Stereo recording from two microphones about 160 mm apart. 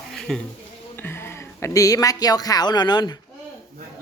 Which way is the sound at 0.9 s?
15° left (ahead or behind).